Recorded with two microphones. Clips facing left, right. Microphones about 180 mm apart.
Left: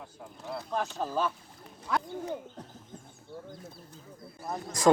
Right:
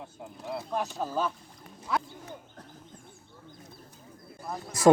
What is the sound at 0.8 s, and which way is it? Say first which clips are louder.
Speech: left 1 dB; 5° right (ahead or behind).